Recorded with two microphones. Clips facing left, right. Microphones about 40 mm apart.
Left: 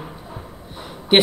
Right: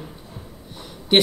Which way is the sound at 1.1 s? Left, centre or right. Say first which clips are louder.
Left 2 dB; left.